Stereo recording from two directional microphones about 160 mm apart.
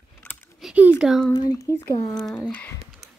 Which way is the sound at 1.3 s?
25° left (ahead or behind).